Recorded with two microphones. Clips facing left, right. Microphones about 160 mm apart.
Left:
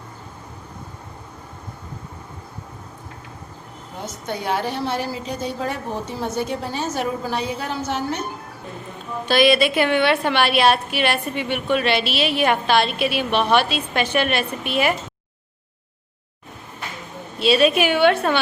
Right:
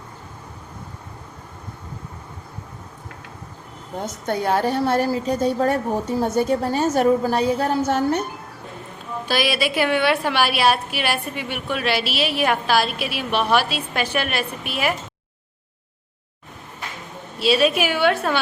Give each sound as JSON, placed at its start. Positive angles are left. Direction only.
{"t": 4.3, "sound": "a woman's voice", "side_deg": -50}
{"t": 9.2, "sound": "a woman's voice", "side_deg": -5}
{"t": 17.4, "sound": "a woman's voice", "side_deg": 0}